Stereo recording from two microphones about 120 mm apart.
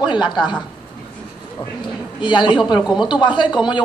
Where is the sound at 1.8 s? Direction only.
40° left (ahead or behind).